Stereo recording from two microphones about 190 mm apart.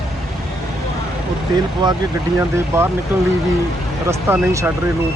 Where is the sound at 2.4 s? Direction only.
15° right (ahead or behind).